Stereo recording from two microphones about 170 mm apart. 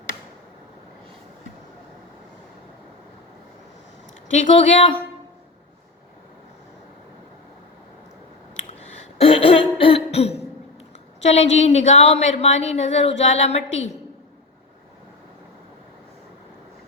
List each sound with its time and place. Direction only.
4.3 s speech: 45° left (ahead or behind)
8.8 s cough: 40° left (ahead or behind)
11.2 s a woman's voice: 40° left (ahead or behind)